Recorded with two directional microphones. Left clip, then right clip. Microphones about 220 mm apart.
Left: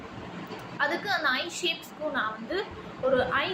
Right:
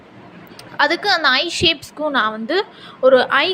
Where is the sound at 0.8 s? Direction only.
40° right (ahead or behind).